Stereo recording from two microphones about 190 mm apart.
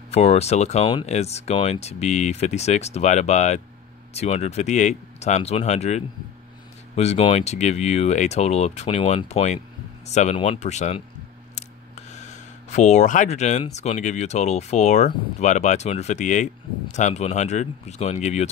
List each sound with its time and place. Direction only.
0.1 s speech: 35° left (ahead or behind)
12.1 s speech: 35° left (ahead or behind)